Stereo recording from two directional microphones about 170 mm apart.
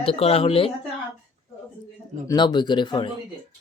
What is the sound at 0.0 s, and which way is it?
Speech, 35° left (ahead or behind).